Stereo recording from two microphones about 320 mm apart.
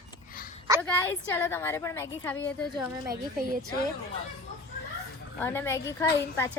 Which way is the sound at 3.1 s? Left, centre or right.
Right.